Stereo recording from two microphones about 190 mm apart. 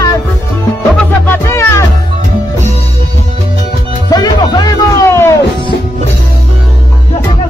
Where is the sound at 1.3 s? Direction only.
15° left (ahead or behind).